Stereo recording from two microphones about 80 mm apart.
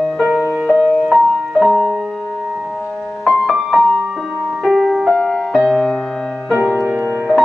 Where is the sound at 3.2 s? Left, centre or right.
Centre.